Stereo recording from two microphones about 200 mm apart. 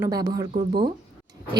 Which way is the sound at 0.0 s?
15° right (ahead or behind).